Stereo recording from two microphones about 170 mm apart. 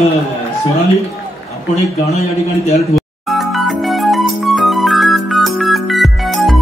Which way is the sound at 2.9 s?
Centre (ahead or behind).